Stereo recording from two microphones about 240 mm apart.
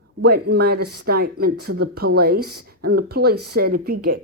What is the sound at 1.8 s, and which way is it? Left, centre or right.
Speech, right.